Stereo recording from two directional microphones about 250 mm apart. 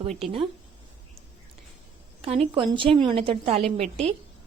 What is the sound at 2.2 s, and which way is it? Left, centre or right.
A woman's voice, right.